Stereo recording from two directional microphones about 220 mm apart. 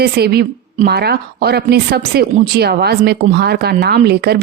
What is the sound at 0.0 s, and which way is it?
A woman's voice, 45° right (ahead or behind).